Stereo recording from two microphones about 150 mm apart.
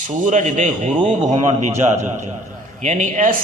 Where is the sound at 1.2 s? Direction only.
30° right (ahead or behind).